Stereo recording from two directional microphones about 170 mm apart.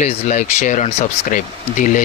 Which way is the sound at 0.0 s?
45° left (ahead or behind).